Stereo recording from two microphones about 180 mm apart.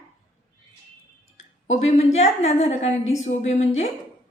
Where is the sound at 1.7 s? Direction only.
35° left (ahead or behind).